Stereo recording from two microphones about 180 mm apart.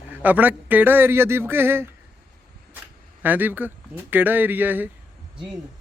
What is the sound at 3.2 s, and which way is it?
A man's voice, 10° right (ahead or behind).